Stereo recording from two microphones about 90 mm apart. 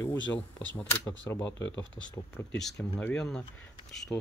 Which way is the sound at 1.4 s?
15° left (ahead or behind).